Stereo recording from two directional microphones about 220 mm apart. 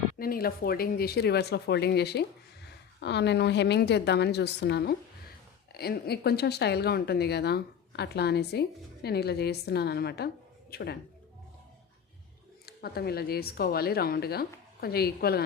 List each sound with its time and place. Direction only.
0.2 s a woman's voice: 40° left (ahead or behind)
12.6 s speech: 45° left (ahead or behind)